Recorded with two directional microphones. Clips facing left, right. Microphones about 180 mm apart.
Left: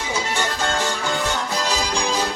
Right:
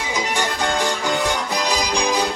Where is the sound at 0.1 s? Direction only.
15° right (ahead or behind).